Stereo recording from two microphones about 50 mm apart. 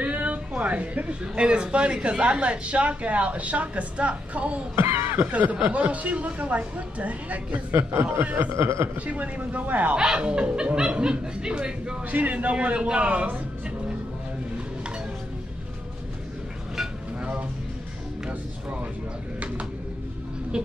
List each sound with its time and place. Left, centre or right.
0.0 s a sound: right
1.2 s speech: right
4.7 s speech: right
5.3 s speech: right
7.7 s speech: right
8.2 s speech: right
8.5 s speech: right
8.9 s speech: right
9.9 s speech: centre
12.1 s speech: right
17.2 s music: right
20.5 s a sound: centre